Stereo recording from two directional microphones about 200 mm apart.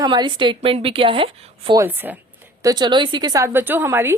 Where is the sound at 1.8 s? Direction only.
10° right (ahead or behind).